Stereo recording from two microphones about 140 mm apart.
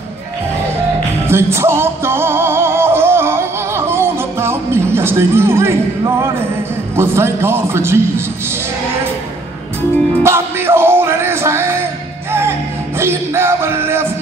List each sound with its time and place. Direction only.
1.2 s music: 20° right (ahead or behind)
7.0 s a man's voice: 20° right (ahead or behind)
10.2 s music: 15° right (ahead or behind)